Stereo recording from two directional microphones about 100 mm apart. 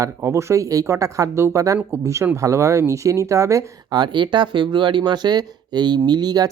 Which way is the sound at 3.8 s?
50° right (ahead or behind).